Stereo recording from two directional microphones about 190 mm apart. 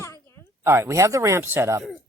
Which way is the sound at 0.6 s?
15° right (ahead or behind).